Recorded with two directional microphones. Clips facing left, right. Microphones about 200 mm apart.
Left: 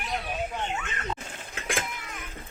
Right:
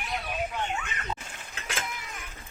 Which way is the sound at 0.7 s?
Centre (ahead or behind).